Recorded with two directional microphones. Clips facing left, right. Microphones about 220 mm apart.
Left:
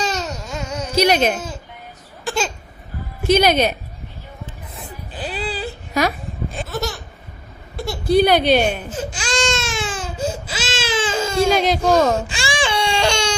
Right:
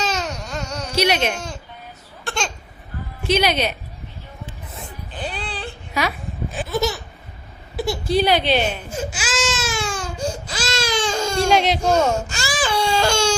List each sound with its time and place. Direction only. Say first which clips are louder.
0.0 s baby cry: left 1 dB; centre (ahead or behind)
1.0 s speech: left 4 dB; 40° left (ahead or behind)
2.2 s a sound: left 4 dB; centre (ahead or behind)
3.2 s a woman's voice: left 4 dB; 45° left (ahead or behind)
4.7 s a sound: left 1 dB; 5° left (ahead or behind)
5.9 s speech: left 4 dB; 45° left (ahead or behind)
6.5 s a sound: right 5 dB; centre (ahead or behind)
8.3 s a woman's voice: left 4 dB; 45° left (ahead or behind)
8.9 s baby cry: left 1 dB; 10° right (ahead or behind)
11.5 s speech: right 1 dB; 40° left (ahead or behind)
12.5 s baby cry: right 1 dB; centre (ahead or behind)